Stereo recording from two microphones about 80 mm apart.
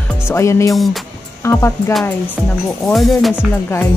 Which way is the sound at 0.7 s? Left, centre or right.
Centre.